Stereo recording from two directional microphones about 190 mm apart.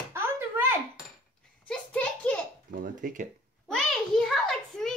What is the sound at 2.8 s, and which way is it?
Speech, 45° right (ahead or behind).